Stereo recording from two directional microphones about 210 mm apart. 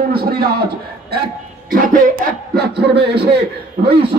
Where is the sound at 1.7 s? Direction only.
40° right (ahead or behind).